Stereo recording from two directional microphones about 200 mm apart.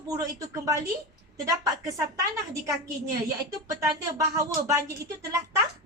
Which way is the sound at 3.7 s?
15° right (ahead or behind).